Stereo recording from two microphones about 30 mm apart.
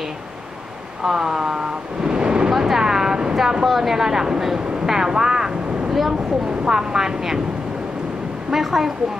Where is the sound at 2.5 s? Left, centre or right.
Centre.